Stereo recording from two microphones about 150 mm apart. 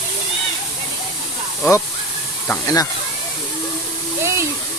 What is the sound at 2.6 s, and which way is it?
Speech, 25° left (ahead or behind).